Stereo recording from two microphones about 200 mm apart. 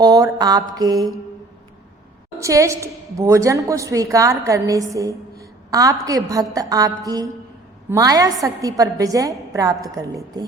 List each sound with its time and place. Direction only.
0.0 s mantra: 20° right (ahead or behind)
2.4 s a woman's voice: 15° right (ahead or behind)